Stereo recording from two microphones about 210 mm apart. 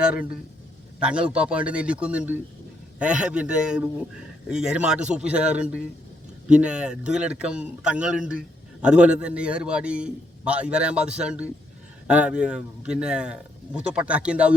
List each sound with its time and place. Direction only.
1.0 s a man's voice: 5° right (ahead or behind)